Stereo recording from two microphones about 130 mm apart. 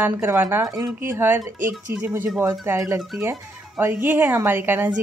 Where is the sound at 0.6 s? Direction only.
25° right (ahead or behind).